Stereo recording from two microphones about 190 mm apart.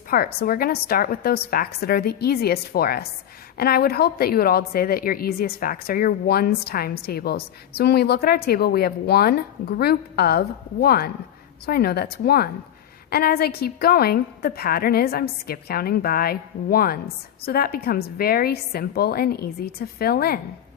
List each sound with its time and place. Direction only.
0.1 s a woman's voice: 55° left (ahead or behind)